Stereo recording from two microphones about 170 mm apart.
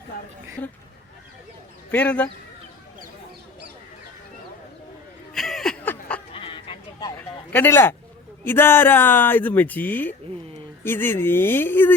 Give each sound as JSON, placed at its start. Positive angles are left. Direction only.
{"t": 1.9, "sound": "speech", "side_deg": 10}
{"t": 5.3, "sound": "snicker", "side_deg": 0}
{"t": 6.3, "sound": "a sound", "side_deg": 30}
{"t": 7.5, "sound": "speech", "side_deg": 10}